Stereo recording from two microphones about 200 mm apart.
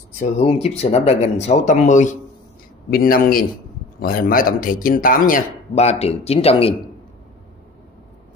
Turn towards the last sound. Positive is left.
turn(degrees=30)  # may be behind; listen again after turning